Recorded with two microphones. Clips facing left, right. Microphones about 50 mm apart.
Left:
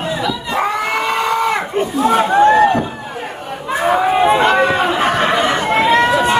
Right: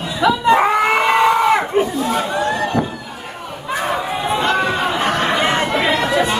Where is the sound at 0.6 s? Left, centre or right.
Centre.